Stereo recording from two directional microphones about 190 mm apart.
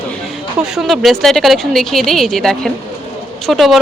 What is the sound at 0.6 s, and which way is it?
Speech, centre (ahead or behind).